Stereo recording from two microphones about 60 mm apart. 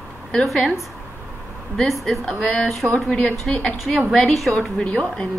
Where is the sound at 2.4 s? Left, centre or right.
Centre.